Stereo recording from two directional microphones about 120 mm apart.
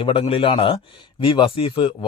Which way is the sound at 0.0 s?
45° left (ahead or behind).